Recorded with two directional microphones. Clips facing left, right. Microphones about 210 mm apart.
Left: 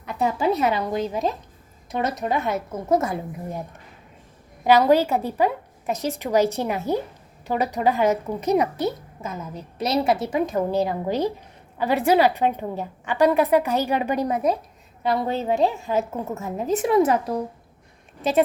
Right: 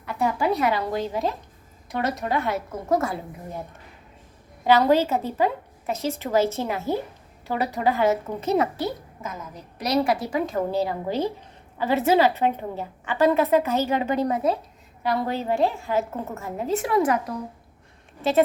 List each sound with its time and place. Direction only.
0.0 s a woman's voice: 20° left (ahead or behind)
4.6 s a woman's voice: 15° left (ahead or behind)
18.2 s a woman's voice: 15° left (ahead or behind)